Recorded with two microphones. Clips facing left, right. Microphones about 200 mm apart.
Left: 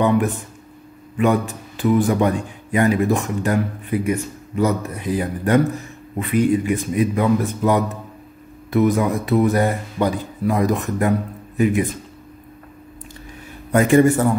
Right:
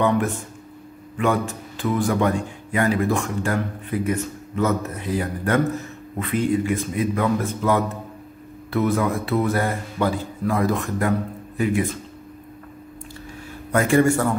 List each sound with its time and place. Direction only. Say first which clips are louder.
1.1 s a man's voice: left 3 dB; 15° left (ahead or behind)
13.7 s speech: left 4 dB; 20° left (ahead or behind)